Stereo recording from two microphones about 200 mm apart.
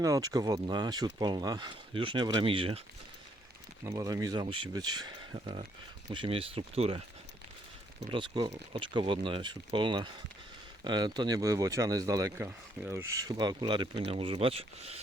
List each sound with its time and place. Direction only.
0.0 s speech: 15° right (ahead or behind)
3.8 s speech: 15° right (ahead or behind)
8.1 s speech: 25° right (ahead or behind)